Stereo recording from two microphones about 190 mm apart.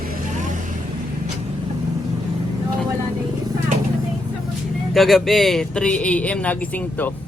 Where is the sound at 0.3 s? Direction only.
40° right (ahead or behind).